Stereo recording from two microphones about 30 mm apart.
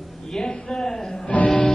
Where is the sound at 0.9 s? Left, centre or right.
Centre.